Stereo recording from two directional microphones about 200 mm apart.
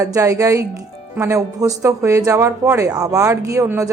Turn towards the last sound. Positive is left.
turn(degrees=-15)  # may be behind; listen again after turning